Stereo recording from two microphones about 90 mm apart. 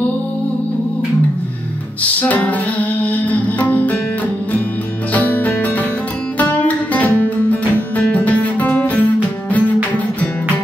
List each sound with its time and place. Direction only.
2.1 s music: 20° left (ahead or behind)
5.1 s music: 20° left (ahead or behind)